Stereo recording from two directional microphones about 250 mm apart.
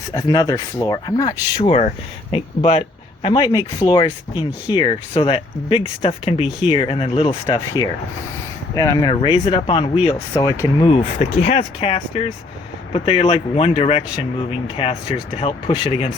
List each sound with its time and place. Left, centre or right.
0.1 s speech: centre
8.7 s speech: centre